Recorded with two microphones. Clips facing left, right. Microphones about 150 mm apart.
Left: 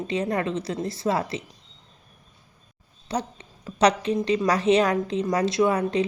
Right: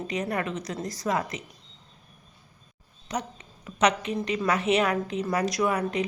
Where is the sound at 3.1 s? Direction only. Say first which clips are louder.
Left 4 dB; 30° left (ahead or behind).